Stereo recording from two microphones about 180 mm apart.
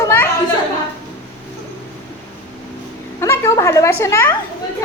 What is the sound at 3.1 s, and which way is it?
A woman's voice, 15° left (ahead or behind).